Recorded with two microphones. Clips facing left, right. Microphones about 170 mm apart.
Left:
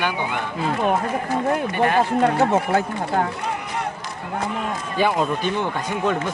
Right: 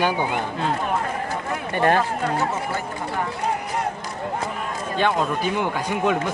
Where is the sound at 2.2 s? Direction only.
60° left (ahead or behind).